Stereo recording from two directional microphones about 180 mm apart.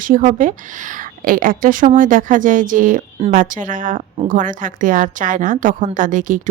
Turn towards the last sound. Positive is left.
turn(degrees=-45)  # may be behind; listen again after turning